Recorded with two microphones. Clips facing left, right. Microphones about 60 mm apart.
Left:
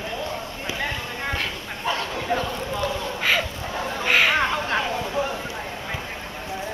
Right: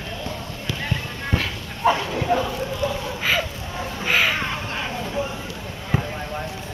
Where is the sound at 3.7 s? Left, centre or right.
Left.